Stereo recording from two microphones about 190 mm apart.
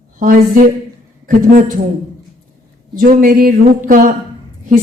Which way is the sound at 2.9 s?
45° right (ahead or behind).